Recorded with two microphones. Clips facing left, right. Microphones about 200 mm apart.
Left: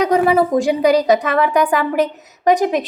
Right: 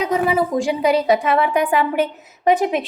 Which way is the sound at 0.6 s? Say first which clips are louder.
Left 3 dB; 40° left (ahead or behind).